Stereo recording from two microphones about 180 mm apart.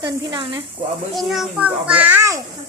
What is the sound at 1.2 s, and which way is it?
A child's voice, centre (ahead or behind).